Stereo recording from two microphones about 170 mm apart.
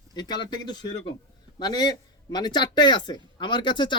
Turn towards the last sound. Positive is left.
turn(degrees=25)  # may be behind; listen again after turning